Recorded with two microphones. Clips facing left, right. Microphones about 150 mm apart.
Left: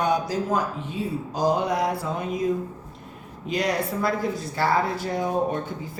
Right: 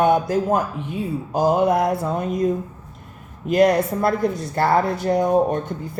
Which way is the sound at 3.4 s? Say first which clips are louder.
Right 9 dB; 55° right (ahead or behind).